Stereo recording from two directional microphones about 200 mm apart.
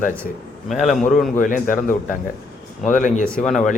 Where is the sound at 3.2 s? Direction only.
5° left (ahead or behind).